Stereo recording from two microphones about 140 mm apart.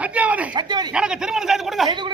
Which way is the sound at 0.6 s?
30° right (ahead or behind).